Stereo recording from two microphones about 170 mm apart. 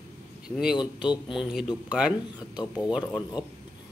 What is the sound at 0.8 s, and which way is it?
Speech, 30° left (ahead or behind).